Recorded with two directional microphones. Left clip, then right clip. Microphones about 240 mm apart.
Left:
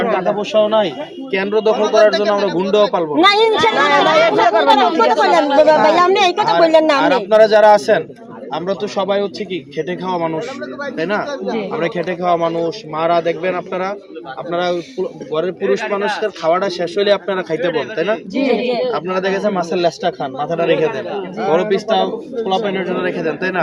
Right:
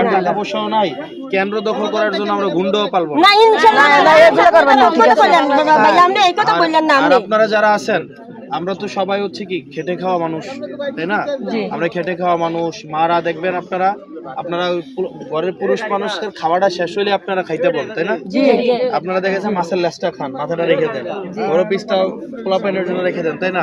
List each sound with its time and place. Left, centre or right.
0.2 s speech: centre
3.2 s a man's voice: right
7.0 s speech: centre
18.3 s a man's voice: right
18.9 s speech: centre